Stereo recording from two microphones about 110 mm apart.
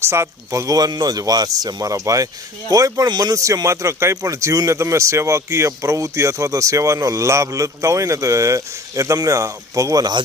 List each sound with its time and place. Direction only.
0.0 s a man's voice: 25° right (ahead or behind)